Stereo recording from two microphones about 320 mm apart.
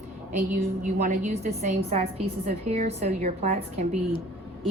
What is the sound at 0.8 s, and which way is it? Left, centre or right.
A woman's voice, right.